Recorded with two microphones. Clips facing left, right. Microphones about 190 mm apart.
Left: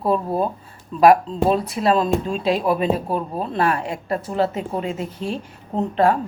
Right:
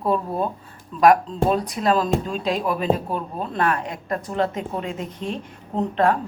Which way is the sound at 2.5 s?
30° left (ahead or behind).